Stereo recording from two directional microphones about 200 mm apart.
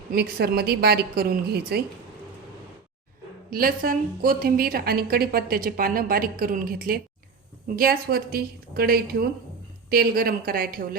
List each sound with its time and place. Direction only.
0.1 s a woman's voice: 50° right (ahead or behind)
3.5 s a woman's voice: 45° right (ahead or behind)